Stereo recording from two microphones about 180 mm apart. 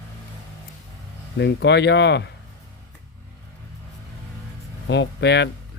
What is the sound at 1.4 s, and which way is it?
Speech, 75° left (ahead or behind).